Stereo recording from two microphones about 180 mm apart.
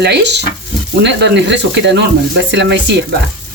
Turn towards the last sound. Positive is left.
turn(degrees=-70)  # may be behind; listen again after turning